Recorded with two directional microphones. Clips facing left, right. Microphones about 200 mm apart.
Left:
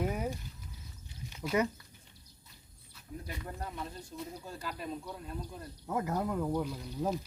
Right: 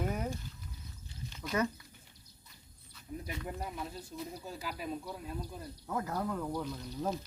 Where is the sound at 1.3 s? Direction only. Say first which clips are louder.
Left 3 dB; 10° left (ahead or behind).